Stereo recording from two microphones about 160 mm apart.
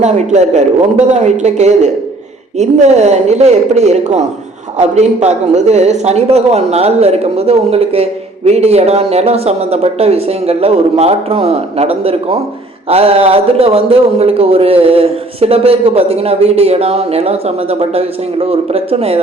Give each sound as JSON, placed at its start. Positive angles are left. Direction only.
{"t": 0.0, "sound": "a man's voice", "side_deg": -45}